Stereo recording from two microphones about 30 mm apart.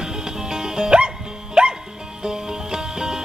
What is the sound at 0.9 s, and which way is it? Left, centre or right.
Music, right.